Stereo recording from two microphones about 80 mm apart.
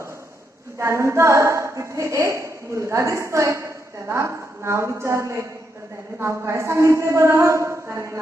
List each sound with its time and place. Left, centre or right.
0.7 s a woman's voice: right